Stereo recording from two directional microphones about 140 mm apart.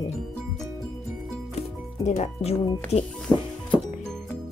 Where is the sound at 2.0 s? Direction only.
50° left (ahead or behind).